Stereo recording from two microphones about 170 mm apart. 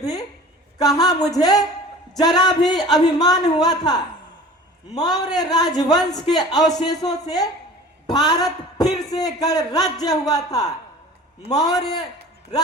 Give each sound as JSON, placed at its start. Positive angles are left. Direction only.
{"t": 0.0, "sound": "a woman's voice", "side_deg": 20}